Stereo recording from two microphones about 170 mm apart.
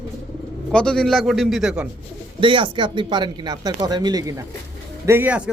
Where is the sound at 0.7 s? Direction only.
5° left (ahead or behind).